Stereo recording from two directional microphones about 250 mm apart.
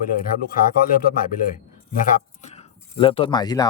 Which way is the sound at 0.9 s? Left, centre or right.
Left.